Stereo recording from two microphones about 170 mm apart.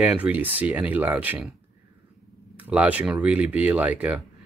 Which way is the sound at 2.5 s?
10° right (ahead or behind).